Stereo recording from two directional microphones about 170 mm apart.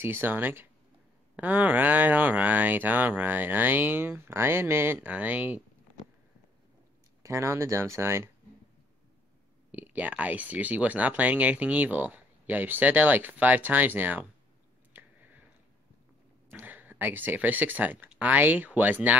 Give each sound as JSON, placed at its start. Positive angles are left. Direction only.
{"t": 0.0, "sound": "speech", "side_deg": -15}
{"t": 7.2, "sound": "speech", "side_deg": -15}
{"t": 9.7, "sound": "speech", "side_deg": -10}
{"t": 14.9, "sound": "chewing", "side_deg": -10}
{"t": 16.4, "sound": "speech", "side_deg": -10}